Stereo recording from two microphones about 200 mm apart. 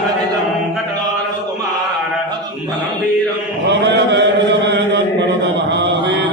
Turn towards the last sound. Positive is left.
turn(degrees=-65)  # may be behind; listen again after turning